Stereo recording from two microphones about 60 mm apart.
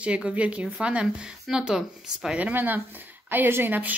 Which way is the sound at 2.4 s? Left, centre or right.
Right.